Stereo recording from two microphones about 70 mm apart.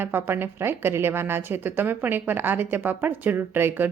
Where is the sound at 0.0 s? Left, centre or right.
Right.